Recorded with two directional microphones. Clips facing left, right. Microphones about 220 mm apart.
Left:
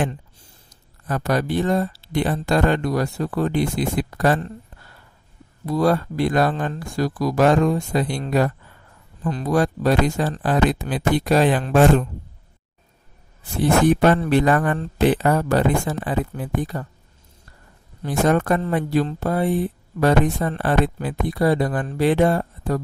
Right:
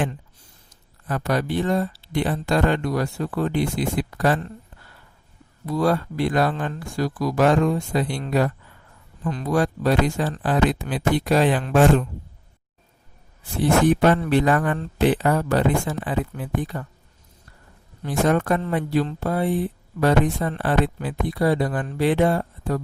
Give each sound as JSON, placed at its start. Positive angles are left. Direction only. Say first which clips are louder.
{"t": 1.0, "sound": "speech", "louder": "left 2 dB", "side_deg": 40}
{"t": 5.6, "sound": "speech", "louder": "left 2 dB", "side_deg": 40}
{"t": 14.0, "sound": "a man's voice", "louder": "left 1 dB", "side_deg": 45}
{"t": 18.0, "sound": "a man's voice", "louder": "left 1 dB", "side_deg": 45}